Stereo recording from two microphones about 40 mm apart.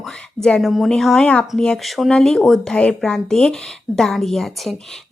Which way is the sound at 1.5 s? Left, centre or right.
Centre.